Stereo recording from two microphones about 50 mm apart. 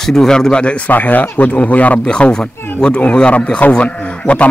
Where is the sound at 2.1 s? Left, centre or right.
Centre.